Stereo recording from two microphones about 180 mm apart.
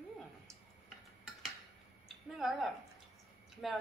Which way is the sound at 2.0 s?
Centre (ahead or behind).